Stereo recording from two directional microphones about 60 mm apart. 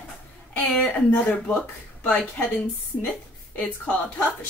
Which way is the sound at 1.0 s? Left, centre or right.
Left.